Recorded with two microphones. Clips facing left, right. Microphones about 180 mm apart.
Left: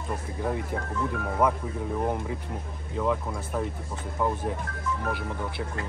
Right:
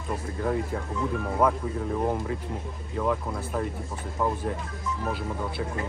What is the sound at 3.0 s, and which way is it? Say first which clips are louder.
Speech: even; 5° left (ahead or behind).